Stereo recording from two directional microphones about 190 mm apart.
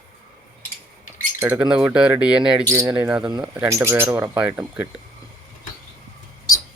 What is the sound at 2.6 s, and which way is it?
Speech, 15° right (ahead or behind).